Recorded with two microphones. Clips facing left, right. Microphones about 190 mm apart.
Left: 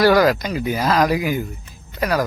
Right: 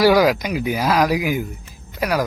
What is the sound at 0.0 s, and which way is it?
Speech, 10° right (ahead or behind).